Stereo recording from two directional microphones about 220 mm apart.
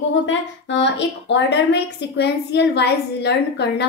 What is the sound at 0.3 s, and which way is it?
A woman's voice, 55° left (ahead or behind).